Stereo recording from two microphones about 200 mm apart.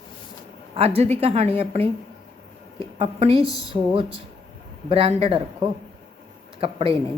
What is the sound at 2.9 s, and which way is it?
Speech, 30° right (ahead or behind).